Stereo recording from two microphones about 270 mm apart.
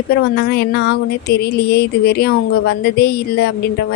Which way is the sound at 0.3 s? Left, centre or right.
Left.